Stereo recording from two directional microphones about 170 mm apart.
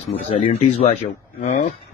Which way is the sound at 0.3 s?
40° left (ahead or behind).